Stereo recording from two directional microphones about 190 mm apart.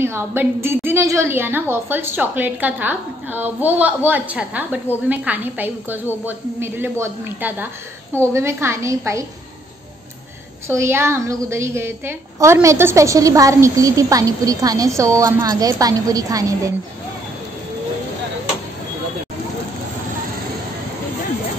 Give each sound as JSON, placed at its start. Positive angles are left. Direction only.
{"t": 0.0, "sound": "a woman's voice", "side_deg": -10}
{"t": 10.7, "sound": "a woman's voice", "side_deg": -15}